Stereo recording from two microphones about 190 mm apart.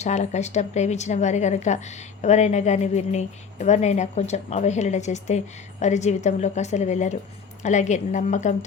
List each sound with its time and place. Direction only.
0.0 s a woman's voice: 35° left (ahead or behind)